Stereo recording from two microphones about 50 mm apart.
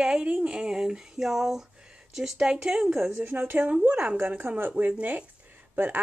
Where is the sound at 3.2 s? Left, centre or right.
Right.